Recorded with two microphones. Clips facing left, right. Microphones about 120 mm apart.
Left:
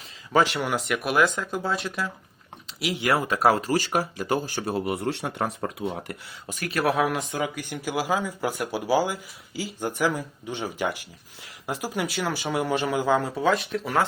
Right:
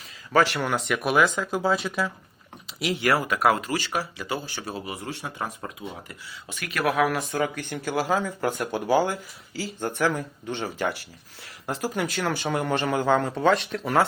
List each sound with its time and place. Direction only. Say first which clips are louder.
0.3 s speech: even; 15° left (ahead or behind)
0.9 s speech: right 1 dB; centre (ahead or behind)
2.9 s speech: even; 20° left (ahead or behind); by 5.5 s 65° left (ahead or behind)
6.5 s speech: left 1 dB; 35° left (ahead or behind); by 14.0 s centre (ahead or behind)